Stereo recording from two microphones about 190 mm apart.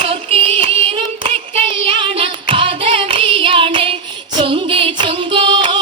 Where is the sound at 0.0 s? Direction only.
30° right (ahead or behind).